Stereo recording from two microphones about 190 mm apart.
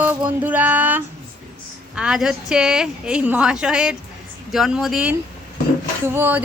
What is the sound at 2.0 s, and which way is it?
A woman's voice, 5° right (ahead or behind).